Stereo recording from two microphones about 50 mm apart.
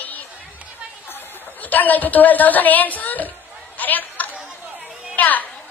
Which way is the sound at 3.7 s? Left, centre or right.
Left.